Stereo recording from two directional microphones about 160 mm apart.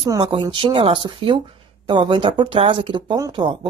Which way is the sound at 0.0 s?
25° right (ahead or behind).